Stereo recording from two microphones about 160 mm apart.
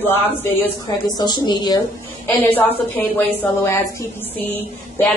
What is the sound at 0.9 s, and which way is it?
Speech, 25° left (ahead or behind).